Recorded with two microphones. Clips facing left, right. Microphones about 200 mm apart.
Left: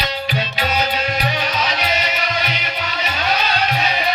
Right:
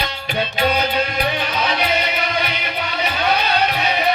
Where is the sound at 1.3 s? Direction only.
55° right (ahead or behind).